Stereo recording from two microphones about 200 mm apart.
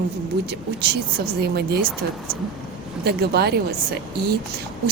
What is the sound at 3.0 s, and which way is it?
Speech, 55° right (ahead or behind).